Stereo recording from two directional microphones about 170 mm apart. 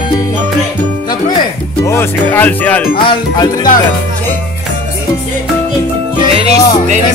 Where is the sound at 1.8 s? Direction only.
15° left (ahead or behind).